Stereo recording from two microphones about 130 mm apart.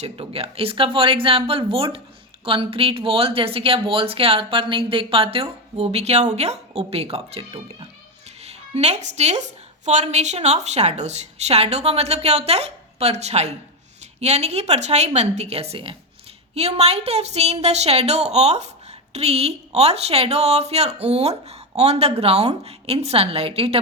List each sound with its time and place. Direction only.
0.0 s a woman's voice: 50° right (ahead or behind)